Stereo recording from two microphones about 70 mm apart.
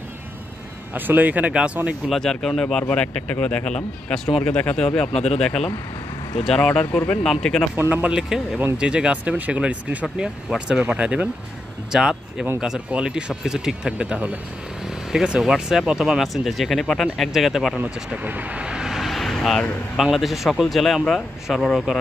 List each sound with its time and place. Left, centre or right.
0.9 s speech: right
2.0 s speech: centre
2.9 s speech: centre
4.5 s speech: centre
4.7 s speech: centre
7.9 s speech: centre
17.7 s speech: right
18.9 s vehicle: centre
20.0 s speech: centre